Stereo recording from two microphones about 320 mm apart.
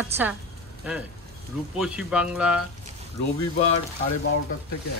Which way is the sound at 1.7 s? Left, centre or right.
Centre.